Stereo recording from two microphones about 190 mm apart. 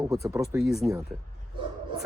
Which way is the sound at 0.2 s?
15° right (ahead or behind).